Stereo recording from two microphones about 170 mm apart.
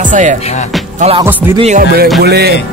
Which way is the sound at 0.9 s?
40° right (ahead or behind).